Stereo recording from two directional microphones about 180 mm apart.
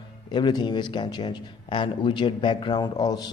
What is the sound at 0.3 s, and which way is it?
Speech, 25° left (ahead or behind).